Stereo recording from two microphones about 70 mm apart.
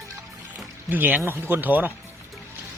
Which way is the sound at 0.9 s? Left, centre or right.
Right.